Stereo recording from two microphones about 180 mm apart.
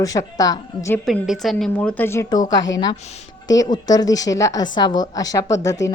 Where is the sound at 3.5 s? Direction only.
20° left (ahead or behind).